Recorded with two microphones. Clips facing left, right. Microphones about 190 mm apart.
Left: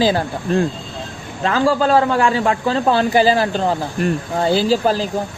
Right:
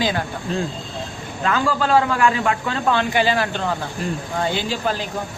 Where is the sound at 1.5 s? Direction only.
30° left (ahead or behind).